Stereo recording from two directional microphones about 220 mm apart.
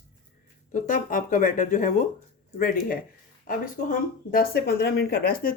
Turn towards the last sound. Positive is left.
turn(degrees=40)  # may be behind; listen again after turning